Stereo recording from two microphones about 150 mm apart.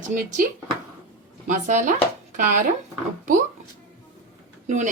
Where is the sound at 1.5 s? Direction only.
55° right (ahead or behind).